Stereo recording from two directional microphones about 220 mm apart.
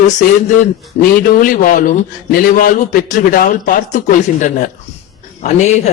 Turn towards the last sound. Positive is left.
turn(degrees=30)  # may be behind; listen again after turning